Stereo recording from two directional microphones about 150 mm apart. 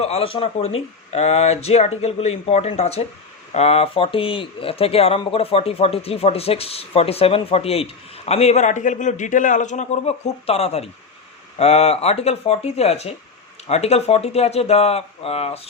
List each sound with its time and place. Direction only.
0.0 s speech: 40° left (ahead or behind)